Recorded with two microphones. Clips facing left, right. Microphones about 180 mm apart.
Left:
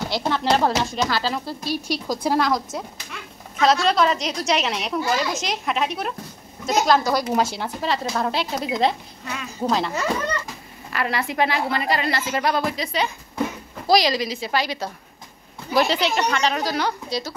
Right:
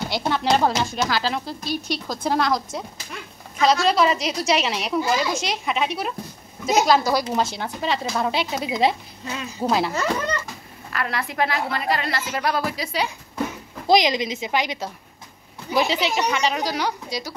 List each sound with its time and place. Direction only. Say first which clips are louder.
0.1 s a woman's voice: even; centre (ahead or behind)
7.3 s a woman's voice: left 2 dB; 5° left (ahead or behind)
9.2 s speech: right 2 dB; 25° right (ahead or behind)
9.6 s a woman's voice: right 1 dB; 5° right (ahead or behind)
13.8 s a woman's voice: right 1 dB; 20° right (ahead or behind)